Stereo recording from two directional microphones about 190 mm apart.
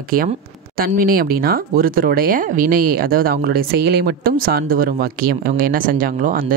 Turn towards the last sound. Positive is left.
turn(degrees=-45)  # may be behind; listen again after turning